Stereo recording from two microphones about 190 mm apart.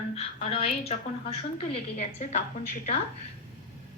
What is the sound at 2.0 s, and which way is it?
Speech, 35° left (ahead or behind).